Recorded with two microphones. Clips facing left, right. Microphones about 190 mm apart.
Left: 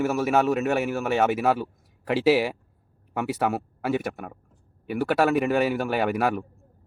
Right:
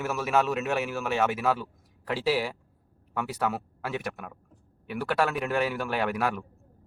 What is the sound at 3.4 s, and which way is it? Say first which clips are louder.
A man's voice: left 2 dB; 55° left (ahead or behind).